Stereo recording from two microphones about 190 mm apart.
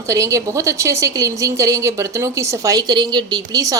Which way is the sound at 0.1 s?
15° right (ahead or behind).